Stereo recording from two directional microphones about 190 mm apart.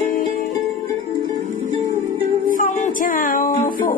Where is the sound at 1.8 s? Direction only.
40° right (ahead or behind).